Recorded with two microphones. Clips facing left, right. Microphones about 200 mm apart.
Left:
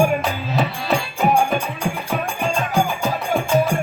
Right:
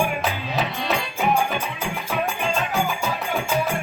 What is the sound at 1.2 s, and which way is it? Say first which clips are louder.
Music: left 3 dB; 45° left (ahead or behind).